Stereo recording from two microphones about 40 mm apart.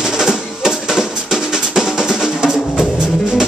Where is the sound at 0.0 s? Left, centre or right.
Centre.